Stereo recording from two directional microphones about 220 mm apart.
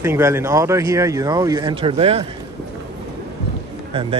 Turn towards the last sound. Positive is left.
turn(degrees=-20)  # may be behind; listen again after turning